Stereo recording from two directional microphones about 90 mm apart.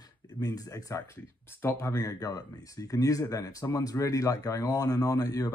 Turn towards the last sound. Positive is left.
turn(degrees=40)  # may be behind; listen again after turning